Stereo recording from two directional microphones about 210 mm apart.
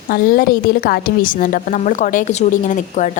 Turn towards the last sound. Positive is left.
turn(degrees=35)  # may be behind; listen again after turning